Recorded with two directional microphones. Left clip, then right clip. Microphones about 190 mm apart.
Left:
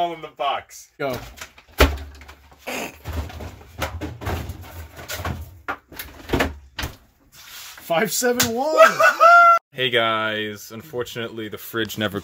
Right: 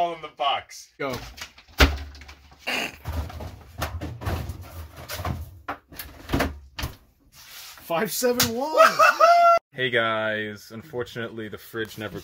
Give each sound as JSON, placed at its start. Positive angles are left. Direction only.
{"t": 0.0, "sound": "speech", "side_deg": 10}
{"t": 2.6, "sound": "a sound", "side_deg": 10}
{"t": 6.2, "sound": "door", "side_deg": 0}
{"t": 7.9, "sound": "music", "side_deg": 35}
{"t": 8.7, "sound": "speech", "side_deg": 0}
{"t": 11.7, "sound": "music", "side_deg": 35}